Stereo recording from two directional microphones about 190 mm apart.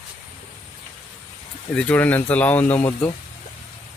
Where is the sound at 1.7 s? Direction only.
5° left (ahead or behind).